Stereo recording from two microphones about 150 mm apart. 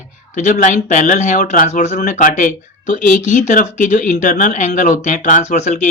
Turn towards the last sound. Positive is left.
turn(degrees=50)  # may be behind; listen again after turning